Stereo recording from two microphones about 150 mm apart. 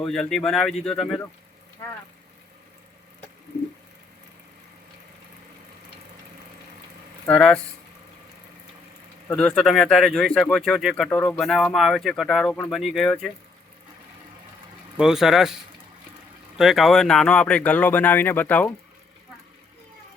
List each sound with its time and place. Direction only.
0.0 s speech: 5° left (ahead or behind)
1.8 s speech: 20° left (ahead or behind)
7.3 s speech: 5° left (ahead or behind)
9.3 s speech: 5° left (ahead or behind)
11.1 s speech: 10° left (ahead or behind)
11.3 s speech: centre (ahead or behind)
14.9 s speech: 5° right (ahead or behind); by 18.7 s 10° left (ahead or behind)